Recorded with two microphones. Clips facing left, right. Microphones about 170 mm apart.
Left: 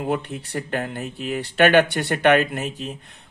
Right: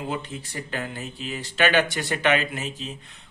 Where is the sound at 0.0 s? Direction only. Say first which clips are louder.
Left 6 dB; 60° left (ahead or behind).